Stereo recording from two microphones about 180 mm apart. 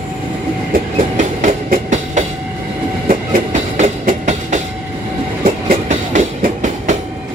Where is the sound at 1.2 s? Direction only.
40° right (ahead or behind).